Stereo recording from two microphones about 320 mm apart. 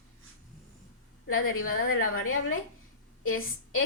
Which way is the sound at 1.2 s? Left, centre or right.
Left.